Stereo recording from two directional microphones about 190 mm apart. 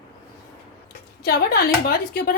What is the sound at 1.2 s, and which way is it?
A woman's voice, 55° left (ahead or behind).